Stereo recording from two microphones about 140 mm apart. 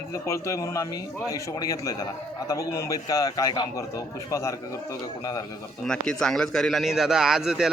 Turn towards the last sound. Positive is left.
turn(degrees=-5)  # may be behind; listen again after turning